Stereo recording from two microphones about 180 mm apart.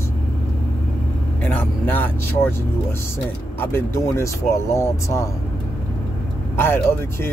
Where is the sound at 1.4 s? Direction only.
10° left (ahead or behind).